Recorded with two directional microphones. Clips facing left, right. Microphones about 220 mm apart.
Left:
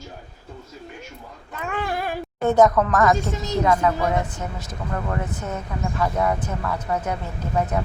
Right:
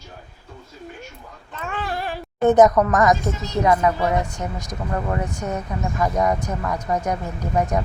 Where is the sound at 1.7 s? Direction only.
15° left (ahead or behind).